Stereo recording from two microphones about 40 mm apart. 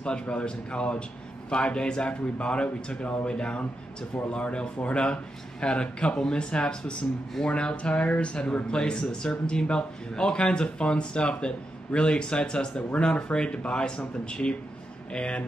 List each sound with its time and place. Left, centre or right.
0.0 s speech: left